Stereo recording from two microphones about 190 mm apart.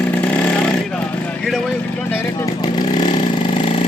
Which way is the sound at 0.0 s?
10° left (ahead or behind).